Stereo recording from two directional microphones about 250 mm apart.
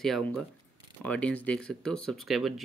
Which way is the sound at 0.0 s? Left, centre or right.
Centre.